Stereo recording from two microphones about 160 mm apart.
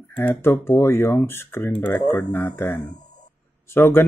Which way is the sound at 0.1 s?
10° left (ahead or behind).